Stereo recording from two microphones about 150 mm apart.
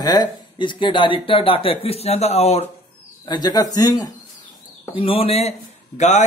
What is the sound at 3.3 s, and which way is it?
Speech, 25° left (ahead or behind).